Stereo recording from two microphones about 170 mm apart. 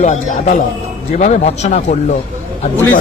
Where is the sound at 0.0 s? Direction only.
45° left (ahead or behind).